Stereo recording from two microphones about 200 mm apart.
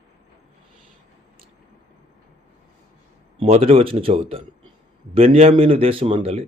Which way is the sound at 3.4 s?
30° right (ahead or behind).